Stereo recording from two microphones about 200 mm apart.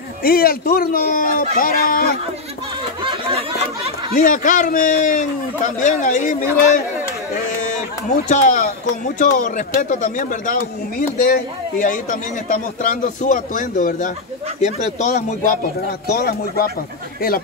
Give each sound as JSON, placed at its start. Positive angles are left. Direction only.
{"t": 0.2, "sound": "speech", "side_deg": 45}
{"t": 3.1, "sound": "a sound", "side_deg": -30}
{"t": 4.1, "sound": "a man's voice", "side_deg": 40}
{"t": 8.3, "sound": "a man's voice", "side_deg": 40}
{"t": 16.1, "sound": "speech", "side_deg": 50}